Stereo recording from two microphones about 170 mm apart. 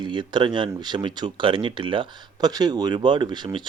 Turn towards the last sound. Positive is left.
turn(degrees=-25)  # may be behind; listen again after turning